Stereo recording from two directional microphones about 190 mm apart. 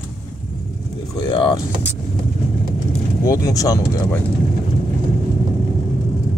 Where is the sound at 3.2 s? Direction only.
20° left (ahead or behind).